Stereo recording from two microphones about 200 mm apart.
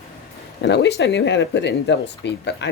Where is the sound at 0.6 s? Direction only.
60° left (ahead or behind).